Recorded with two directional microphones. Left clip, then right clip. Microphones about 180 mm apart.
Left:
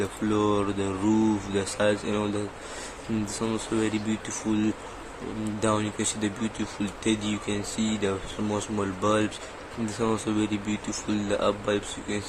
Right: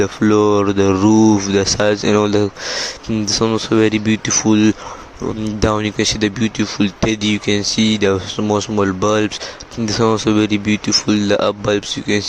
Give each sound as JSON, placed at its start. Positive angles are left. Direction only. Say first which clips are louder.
{"t": 0.0, "sound": "speech", "louder": "right 12 dB", "side_deg": -45}
{"t": 3.4, "sound": "speech", "louder": "right 14 dB", "side_deg": -45}